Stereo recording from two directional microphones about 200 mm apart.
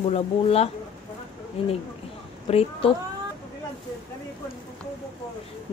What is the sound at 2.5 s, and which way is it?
Speech, 30° left (ahead or behind).